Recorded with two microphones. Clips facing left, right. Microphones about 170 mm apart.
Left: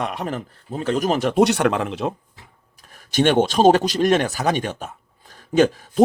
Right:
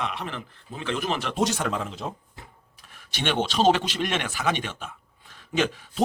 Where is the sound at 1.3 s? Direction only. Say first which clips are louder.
Left 9 dB; 65° left (ahead or behind).